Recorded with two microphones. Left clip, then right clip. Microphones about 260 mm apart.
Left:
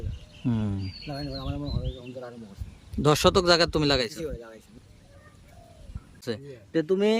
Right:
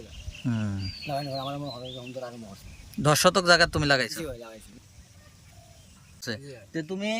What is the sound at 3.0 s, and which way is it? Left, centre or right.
Speech, centre.